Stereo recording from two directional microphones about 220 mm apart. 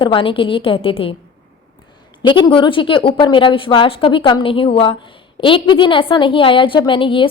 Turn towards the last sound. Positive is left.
turn(degrees=25)  # may be behind; listen again after turning